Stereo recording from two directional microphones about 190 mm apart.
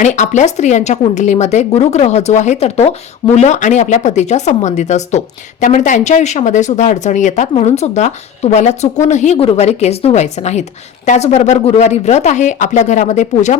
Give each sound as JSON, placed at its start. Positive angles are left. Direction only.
{"t": 0.0, "sound": "speech", "side_deg": 40}